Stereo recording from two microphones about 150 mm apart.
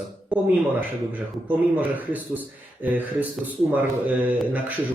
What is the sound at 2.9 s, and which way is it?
Speech, 10° right (ahead or behind).